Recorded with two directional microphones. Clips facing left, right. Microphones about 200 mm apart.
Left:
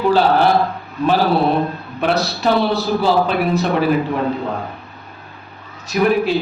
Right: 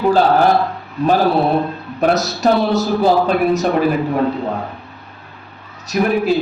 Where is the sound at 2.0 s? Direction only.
45° right (ahead or behind).